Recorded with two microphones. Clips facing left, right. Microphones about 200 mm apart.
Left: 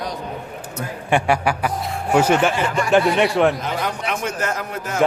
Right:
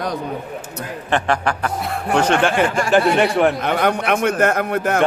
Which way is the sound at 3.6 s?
60° right (ahead or behind).